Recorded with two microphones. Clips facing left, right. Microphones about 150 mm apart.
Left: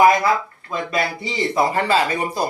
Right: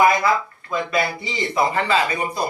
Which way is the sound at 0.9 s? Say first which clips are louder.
Left 2 dB; 40° left (ahead or behind).